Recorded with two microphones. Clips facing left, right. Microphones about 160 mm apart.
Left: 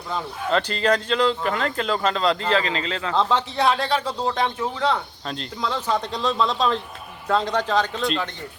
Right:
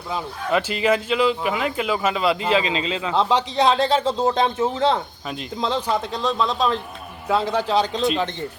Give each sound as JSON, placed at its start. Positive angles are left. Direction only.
{"t": 0.5, "sound": "speech", "side_deg": -10}
{"t": 6.1, "sound": "speech", "side_deg": 0}